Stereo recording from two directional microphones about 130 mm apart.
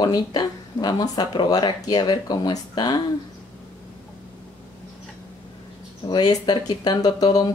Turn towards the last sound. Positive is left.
turn(degrees=30)  # may be behind; listen again after turning